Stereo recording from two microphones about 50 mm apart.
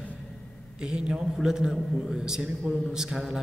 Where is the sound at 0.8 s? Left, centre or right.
Centre.